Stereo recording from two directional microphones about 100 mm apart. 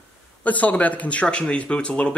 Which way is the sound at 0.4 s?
15° left (ahead or behind).